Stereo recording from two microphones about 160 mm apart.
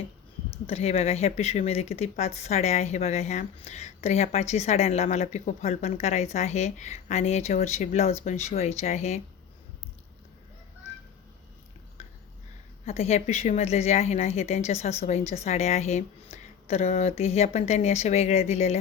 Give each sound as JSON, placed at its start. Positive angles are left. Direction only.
{"t": 0.7, "sound": "speech", "side_deg": 40}
{"t": 12.0, "sound": "a sound", "side_deg": 40}
{"t": 12.8, "sound": "a woman's voice", "side_deg": 40}